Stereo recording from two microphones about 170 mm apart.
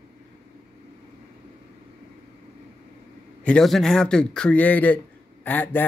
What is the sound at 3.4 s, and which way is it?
A man's voice, 5° left (ahead or behind).